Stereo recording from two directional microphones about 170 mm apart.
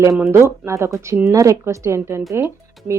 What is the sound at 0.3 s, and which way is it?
A woman's voice, 15° right (ahead or behind).